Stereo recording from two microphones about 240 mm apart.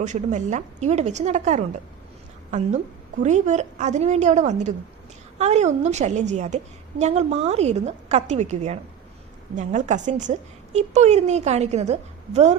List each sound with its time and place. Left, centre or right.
0.0 s a woman's voice: right